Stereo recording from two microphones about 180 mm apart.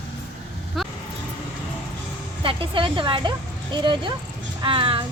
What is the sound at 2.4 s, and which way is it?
A woman's voice, 30° right (ahead or behind).